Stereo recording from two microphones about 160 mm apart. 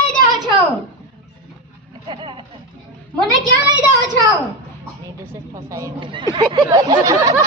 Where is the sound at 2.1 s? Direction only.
30° right (ahead or behind).